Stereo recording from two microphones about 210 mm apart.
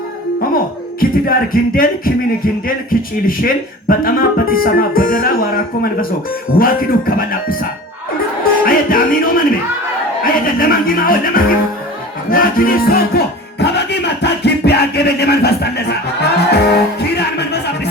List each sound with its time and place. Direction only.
0.5 s speech: 45° left (ahead or behind)
8.6 s music: 40° left (ahead or behind)
10.4 s speech: 45° left (ahead or behind)
12.3 s music: 45° left (ahead or behind)
16.5 s speech: 50° left (ahead or behind)